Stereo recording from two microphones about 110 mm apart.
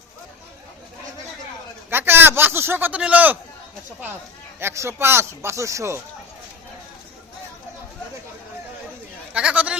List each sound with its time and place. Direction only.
1.9 s speech: 20° right (ahead or behind)
4.6 s speech: 25° right (ahead or behind)
9.3 s speech: 10° right (ahead or behind)